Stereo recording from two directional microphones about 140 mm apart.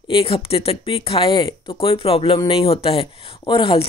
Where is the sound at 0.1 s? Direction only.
40° left (ahead or behind).